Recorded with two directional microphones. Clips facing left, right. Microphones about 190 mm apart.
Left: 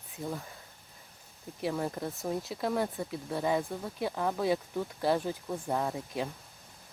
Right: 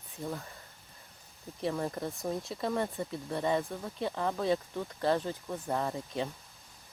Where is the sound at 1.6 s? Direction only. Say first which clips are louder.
Even; 5° left (ahead or behind).